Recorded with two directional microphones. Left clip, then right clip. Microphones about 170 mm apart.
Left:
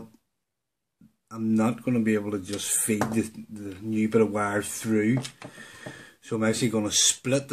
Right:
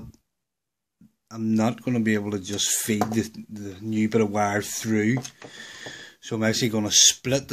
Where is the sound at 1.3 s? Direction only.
50° right (ahead or behind).